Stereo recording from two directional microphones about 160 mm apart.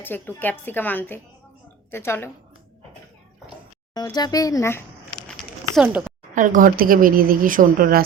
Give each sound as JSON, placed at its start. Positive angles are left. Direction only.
{"t": 0.0, "sound": "a woman's voice", "side_deg": 10}
{"t": 3.9, "sound": "speech", "side_deg": 25}
{"t": 5.7, "sound": "speech", "side_deg": -10}
{"t": 6.3, "sound": "speech", "side_deg": -55}